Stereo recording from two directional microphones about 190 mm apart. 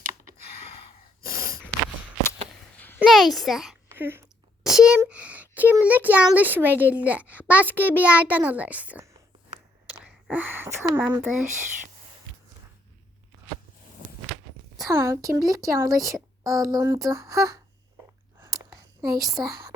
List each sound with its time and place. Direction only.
2.7 s a sound: 10° left (ahead or behind)
3.0 s a child's voice: centre (ahead or behind)
3.8 s a sound: 10° right (ahead or behind)
4.6 s a child's voice: 5° right (ahead or behind)
14.8 s a woman's voice: 15° right (ahead or behind)
18.3 s chewing: 15° right (ahead or behind)
19.1 s a woman's voice: 20° right (ahead or behind)